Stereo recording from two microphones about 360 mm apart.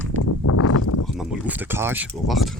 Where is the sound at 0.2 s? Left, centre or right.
Left.